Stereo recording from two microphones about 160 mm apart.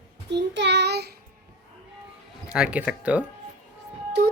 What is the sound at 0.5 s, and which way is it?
Child singing, 90° right.